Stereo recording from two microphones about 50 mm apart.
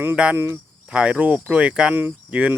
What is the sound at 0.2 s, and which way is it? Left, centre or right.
Speech, right.